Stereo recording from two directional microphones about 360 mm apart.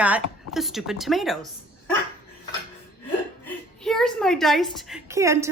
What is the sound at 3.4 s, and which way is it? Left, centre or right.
A woman's voice, centre.